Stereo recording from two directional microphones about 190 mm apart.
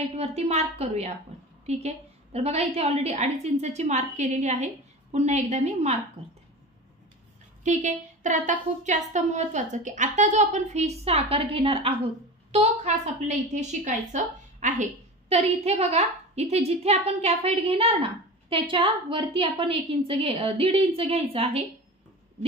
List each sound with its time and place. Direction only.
0.1 s a woman's voice: 35° right (ahead or behind)
7.6 s a woman's voice: 40° right (ahead or behind)